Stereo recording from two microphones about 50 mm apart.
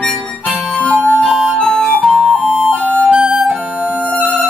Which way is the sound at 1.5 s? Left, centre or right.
Centre.